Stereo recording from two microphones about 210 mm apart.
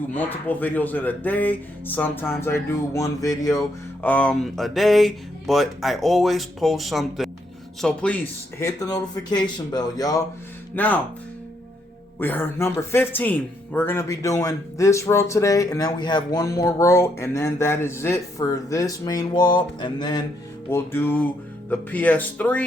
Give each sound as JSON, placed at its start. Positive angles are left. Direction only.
{"t": 0.1, "sound": "speech", "side_deg": 10}
{"t": 4.0, "sound": "speech", "side_deg": 5}
{"t": 10.8, "sound": "speech", "side_deg": 5}
{"t": 12.2, "sound": "speech", "side_deg": 10}